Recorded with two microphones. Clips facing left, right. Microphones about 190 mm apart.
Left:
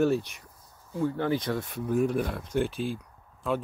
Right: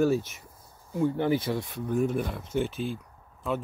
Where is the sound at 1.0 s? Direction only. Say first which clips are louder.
Right 2 dB; 15° right (ahead or behind).